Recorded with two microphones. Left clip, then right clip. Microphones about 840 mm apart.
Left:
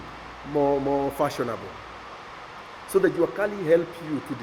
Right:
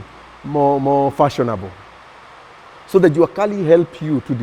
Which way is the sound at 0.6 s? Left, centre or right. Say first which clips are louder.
Right 9 dB; right.